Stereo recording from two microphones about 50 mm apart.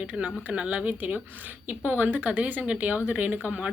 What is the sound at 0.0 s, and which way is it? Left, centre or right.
A woman's voice, right.